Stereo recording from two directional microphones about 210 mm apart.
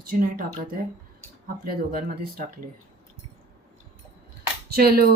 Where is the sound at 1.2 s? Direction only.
45° right (ahead or behind).